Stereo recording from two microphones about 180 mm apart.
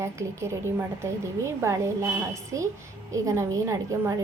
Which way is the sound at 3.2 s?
15° right (ahead or behind).